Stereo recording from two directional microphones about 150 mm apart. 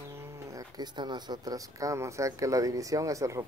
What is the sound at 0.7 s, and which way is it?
Speech, 30° right (ahead or behind).